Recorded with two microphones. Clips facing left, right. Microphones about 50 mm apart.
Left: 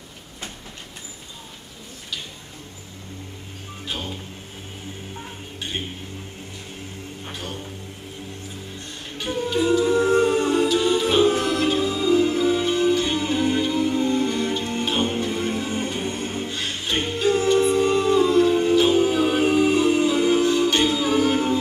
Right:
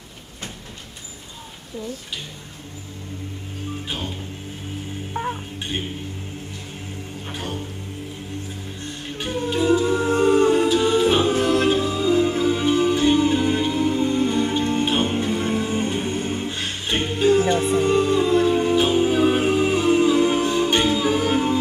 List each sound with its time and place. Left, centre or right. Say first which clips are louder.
9.6 s a capella: right 1 dB; centre
9.9 s humming: left 2 dB; centre
10.2 s music: right 3 dB; centre
11.5 s music: right 2 dB; right